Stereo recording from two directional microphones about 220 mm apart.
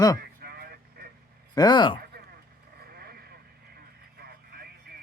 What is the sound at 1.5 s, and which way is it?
Speech, 20° left (ahead or behind).